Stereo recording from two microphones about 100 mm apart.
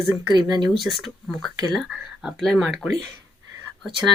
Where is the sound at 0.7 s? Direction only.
Centre (ahead or behind).